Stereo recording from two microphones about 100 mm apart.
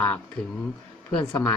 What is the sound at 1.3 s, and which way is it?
Speech, 25° left (ahead or behind).